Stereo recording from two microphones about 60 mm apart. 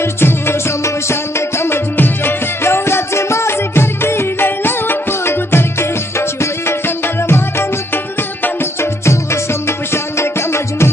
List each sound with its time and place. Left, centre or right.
0.0 s music: left
9.0 s music: left